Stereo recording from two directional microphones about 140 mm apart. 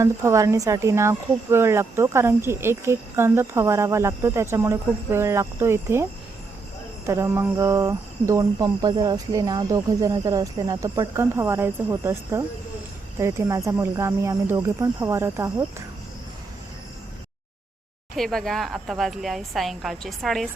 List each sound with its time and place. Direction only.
0.0 s speech: 20° right (ahead or behind)
7.1 s speech: 20° right (ahead or behind)
18.2 s a woman's voice: centre (ahead or behind)